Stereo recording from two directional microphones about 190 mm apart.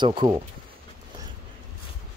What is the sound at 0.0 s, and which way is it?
Speech, 25° right (ahead or behind).